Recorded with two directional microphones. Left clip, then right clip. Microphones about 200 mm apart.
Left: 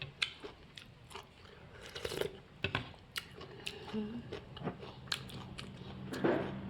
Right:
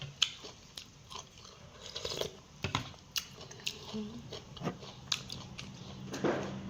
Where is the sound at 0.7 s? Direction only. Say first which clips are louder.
Right 4 dB; 15° left (ahead or behind).